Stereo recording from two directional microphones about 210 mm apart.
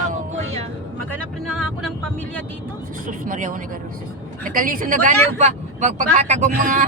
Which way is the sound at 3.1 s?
40° right (ahead or behind).